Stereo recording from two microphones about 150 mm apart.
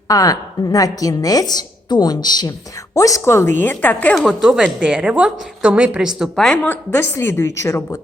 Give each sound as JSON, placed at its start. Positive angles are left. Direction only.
{"t": 0.1, "sound": "a woman's voice", "side_deg": 25}
{"t": 4.1, "sound": "a woman's voice", "side_deg": 0}